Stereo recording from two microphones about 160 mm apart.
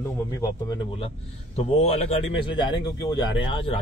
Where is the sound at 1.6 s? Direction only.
40° left (ahead or behind).